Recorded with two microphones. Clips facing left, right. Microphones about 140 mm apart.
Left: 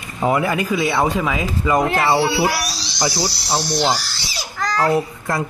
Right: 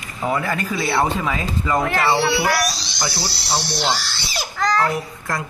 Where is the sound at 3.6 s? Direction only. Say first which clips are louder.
Left 4 dB; 45° left (ahead or behind).